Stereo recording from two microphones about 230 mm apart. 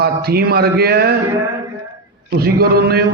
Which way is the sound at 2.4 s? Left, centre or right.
Right.